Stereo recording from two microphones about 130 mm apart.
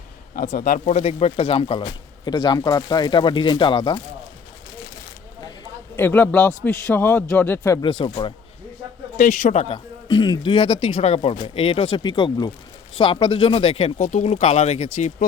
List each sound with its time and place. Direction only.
0.3 s speech: 75° left (ahead or behind); by 4.0 s 35° left (ahead or behind)
6.0 s a man's voice: 15° left (ahead or behind)
7.8 s speech: 35° left (ahead or behind)
9.1 s a man's voice: 70° left (ahead or behind); by 13.9 s 45° left (ahead or behind)
14.0 s speech: 80° left
14.3 s speech: 55° left (ahead or behind)